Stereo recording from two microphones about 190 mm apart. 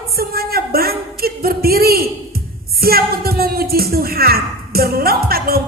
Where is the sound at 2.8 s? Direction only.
55° right (ahead or behind).